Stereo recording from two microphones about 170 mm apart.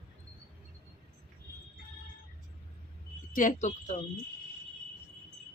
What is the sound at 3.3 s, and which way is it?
Speech, 50° left (ahead or behind).